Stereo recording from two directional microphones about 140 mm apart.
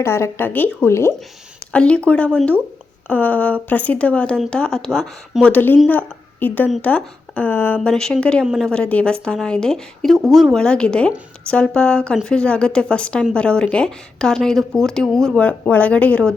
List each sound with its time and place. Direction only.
0.0 s speech: 20° left (ahead or behind)
1.7 s a woman's voice: 5° left (ahead or behind)